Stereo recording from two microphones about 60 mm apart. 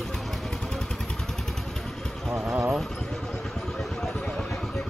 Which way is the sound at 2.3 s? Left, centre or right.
Right.